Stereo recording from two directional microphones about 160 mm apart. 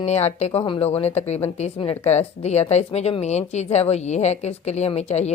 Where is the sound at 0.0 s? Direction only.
40° left (ahead or behind).